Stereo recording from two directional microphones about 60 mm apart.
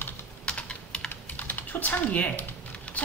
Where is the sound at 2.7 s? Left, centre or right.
Left.